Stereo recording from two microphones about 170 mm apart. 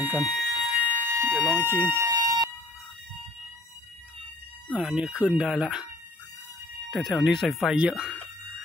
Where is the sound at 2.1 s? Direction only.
25° right (ahead or behind).